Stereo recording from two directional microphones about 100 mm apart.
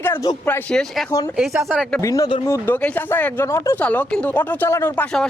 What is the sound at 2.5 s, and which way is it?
Speech, 20° left (ahead or behind).